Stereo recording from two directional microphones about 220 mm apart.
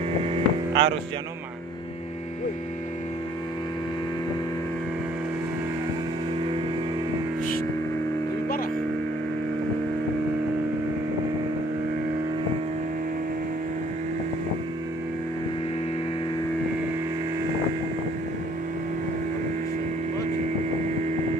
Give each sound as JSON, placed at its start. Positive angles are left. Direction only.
{"t": 0.2, "sound": "hum", "side_deg": -25}